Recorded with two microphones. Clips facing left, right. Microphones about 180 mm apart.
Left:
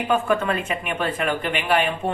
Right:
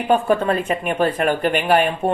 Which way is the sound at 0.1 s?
35° right (ahead or behind).